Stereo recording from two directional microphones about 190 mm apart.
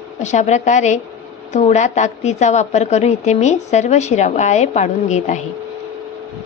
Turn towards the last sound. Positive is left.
turn(degrees=40)  # may be behind; listen again after turning